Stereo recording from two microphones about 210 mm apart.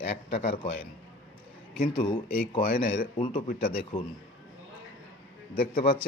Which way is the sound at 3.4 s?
45° left (ahead or behind).